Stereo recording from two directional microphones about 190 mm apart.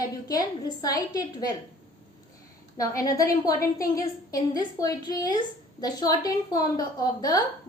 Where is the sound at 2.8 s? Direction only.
20° left (ahead or behind).